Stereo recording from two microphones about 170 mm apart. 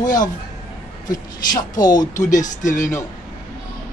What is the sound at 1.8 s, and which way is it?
Speech, 25° left (ahead or behind).